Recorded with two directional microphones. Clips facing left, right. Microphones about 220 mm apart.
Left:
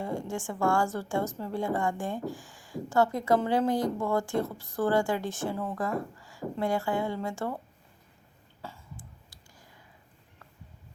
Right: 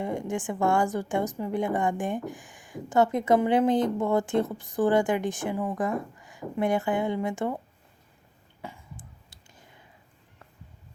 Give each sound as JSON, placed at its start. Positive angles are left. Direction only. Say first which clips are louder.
{"t": 0.0, "sound": "a woman's voice", "louder": "right 3 dB", "side_deg": -20}
{"t": 8.6, "sound": "cough", "louder": "right 2 dB", "side_deg": -20}